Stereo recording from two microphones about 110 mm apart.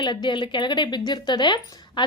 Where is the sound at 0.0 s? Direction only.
45° left (ahead or behind).